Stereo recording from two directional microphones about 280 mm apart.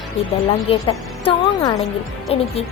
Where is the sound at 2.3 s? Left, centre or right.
Left.